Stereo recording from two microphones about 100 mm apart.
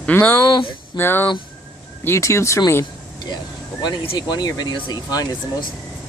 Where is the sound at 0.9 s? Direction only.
20° left (ahead or behind).